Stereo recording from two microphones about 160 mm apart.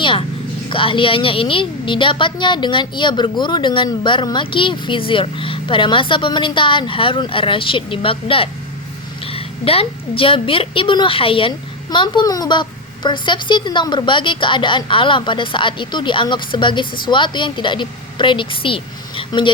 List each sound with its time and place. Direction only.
0.0 s a woman's voice: 35° left (ahead or behind)